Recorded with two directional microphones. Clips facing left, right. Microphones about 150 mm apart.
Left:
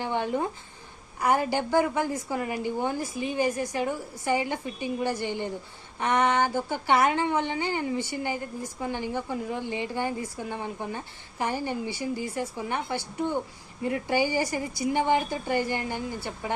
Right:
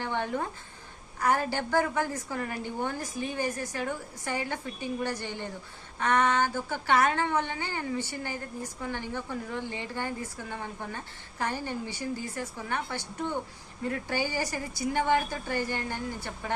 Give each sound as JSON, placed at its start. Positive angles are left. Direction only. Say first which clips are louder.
{"t": 0.0, "sound": "a woman's voice", "louder": "left 3 dB", "side_deg": 15}